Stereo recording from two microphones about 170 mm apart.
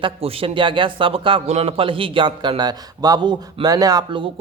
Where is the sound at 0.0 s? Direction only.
35° right (ahead or behind).